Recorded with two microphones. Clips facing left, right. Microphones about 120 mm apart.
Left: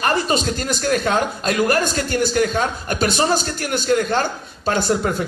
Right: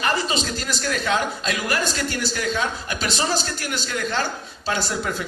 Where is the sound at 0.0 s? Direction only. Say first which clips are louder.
Left 4 dB; 50° left (ahead or behind).